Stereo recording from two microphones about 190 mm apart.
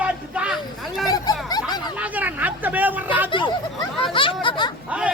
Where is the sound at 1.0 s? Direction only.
20° left (ahead or behind).